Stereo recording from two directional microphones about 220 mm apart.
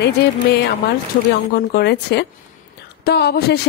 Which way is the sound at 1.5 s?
45° left (ahead or behind).